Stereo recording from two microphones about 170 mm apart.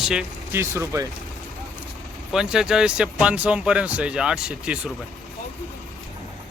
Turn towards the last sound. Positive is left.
turn(degrees=-5)  # may be behind; listen again after turning